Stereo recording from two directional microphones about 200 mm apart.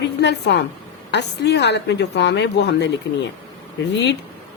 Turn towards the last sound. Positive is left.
turn(degrees=60)  # may be behind; listen again after turning